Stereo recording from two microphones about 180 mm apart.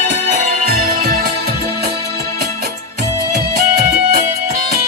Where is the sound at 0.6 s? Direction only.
55° right (ahead or behind).